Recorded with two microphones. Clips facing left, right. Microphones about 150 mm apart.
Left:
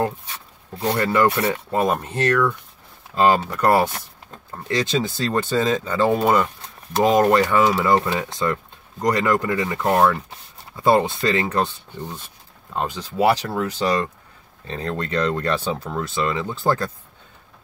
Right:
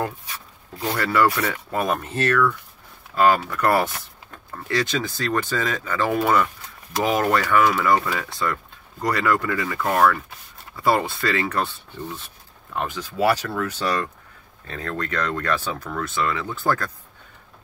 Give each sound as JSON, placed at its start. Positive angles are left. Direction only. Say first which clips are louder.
{"t": 0.0, "sound": "speech", "louder": "left 4 dB", "side_deg": 25}
{"t": 12.7, "sound": "speech", "louder": "left 3 dB", "side_deg": 20}